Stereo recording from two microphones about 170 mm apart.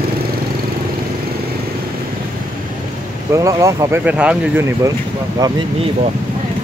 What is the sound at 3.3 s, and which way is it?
Speech, 20° right (ahead or behind).